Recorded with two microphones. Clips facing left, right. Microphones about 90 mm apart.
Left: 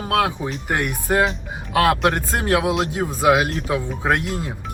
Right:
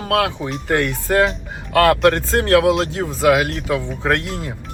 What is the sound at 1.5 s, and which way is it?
Music, 15° left (ahead or behind).